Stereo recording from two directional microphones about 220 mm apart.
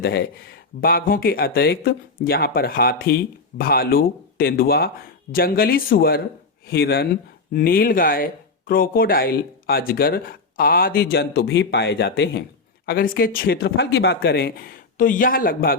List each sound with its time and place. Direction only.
0.0 s speech: 45° left (ahead or behind)